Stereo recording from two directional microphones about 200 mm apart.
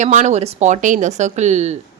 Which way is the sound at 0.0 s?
35° right (ahead or behind).